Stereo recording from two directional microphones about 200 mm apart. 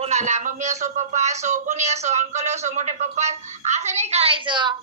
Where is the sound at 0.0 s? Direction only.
35° right (ahead or behind).